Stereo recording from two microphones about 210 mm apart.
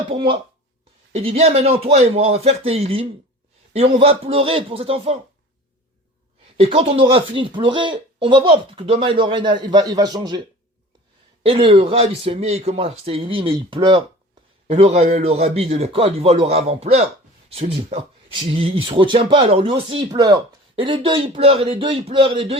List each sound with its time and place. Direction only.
0.1 s speech: 20° right (ahead or behind)
6.6 s speech: 30° right (ahead or behind)
11.4 s speech: 25° right (ahead or behind)